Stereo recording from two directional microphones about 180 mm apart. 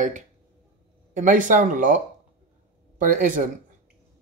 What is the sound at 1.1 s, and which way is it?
Speech, 45° right (ahead or behind).